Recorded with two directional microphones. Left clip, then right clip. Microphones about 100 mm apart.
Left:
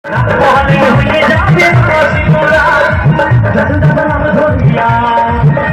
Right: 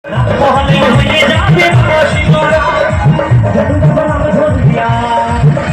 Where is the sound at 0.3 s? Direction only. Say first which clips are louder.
Left 2 dB; 25° right (ahead or behind).